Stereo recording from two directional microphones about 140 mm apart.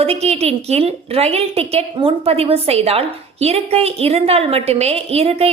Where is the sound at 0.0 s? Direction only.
45° right (ahead or behind).